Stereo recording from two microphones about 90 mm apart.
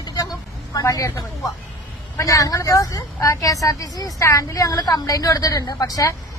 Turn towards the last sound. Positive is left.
turn(degrees=40)  # may be behind; listen again after turning